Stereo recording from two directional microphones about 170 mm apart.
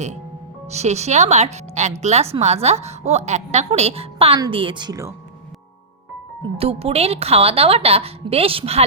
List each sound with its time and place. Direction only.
0.7 s speech: 40° right (ahead or behind); by 5.1 s 20° right (ahead or behind)
6.6 s speech: 35° right (ahead or behind)